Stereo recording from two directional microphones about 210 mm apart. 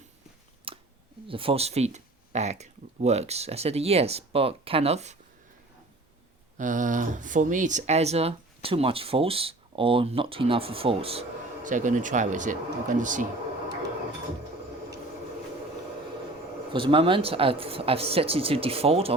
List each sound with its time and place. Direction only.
0.7 s a sound: 25° right (ahead or behind)
1.3 s speech: 25° right (ahead or behind)
6.6 s speech: 35° right (ahead or behind)
16.7 s speech: 25° right (ahead or behind)